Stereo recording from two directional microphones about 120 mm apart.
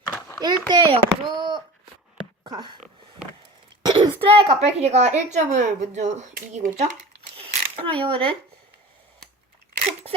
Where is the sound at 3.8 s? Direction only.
40° right (ahead or behind).